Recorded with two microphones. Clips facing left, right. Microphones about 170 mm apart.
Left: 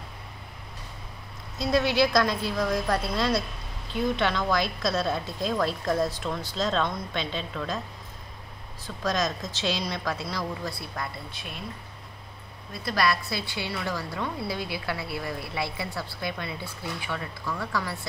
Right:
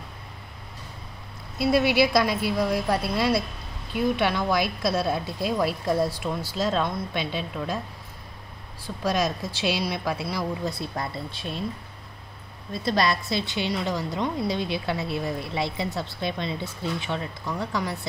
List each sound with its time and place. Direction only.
1.6 s a woman's voice: 10° right (ahead or behind)
8.8 s a woman's voice: 10° right (ahead or behind); by 11.6 s 30° right (ahead or behind)
12.8 s a woman's voice: 25° right (ahead or behind)